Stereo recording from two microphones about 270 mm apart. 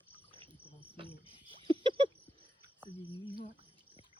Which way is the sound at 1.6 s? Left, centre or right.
Centre.